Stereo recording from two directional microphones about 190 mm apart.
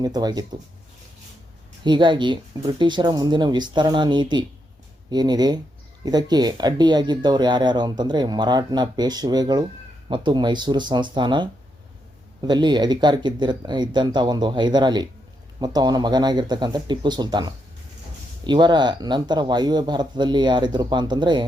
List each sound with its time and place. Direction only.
0.0 s speech: 20° right (ahead or behind)
1.8 s speech: 25° right (ahead or behind)